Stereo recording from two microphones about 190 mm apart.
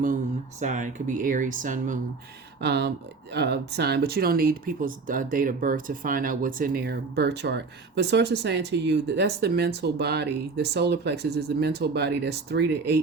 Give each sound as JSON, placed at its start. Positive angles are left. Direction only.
{"t": 0.6, "sound": "speech", "side_deg": -40}
{"t": 2.6, "sound": "speech", "side_deg": -60}